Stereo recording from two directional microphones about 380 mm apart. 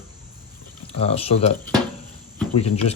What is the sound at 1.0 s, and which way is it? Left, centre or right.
Speech, centre.